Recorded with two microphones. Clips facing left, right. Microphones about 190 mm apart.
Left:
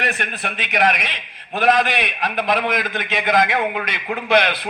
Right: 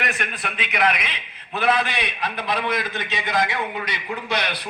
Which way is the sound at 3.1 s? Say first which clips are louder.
Left 6 dB; 55° left (ahead or behind).